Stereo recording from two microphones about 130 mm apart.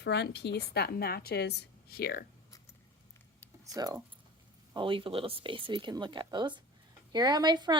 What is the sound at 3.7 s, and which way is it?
Speech, 30° right (ahead or behind).